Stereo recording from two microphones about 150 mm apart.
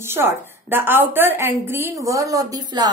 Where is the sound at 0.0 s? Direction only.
15° right (ahead or behind).